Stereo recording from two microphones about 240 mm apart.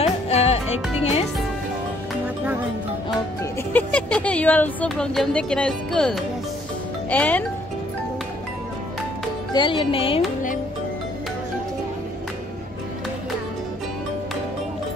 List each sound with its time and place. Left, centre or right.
0.0 s music: left
3.7 s speech: centre
9.5 s music: centre